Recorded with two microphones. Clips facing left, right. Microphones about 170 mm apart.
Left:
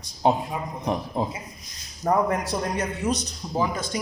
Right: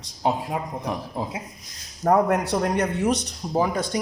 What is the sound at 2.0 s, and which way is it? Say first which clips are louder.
A man's voice: right 3 dB; 75° right (ahead or behind).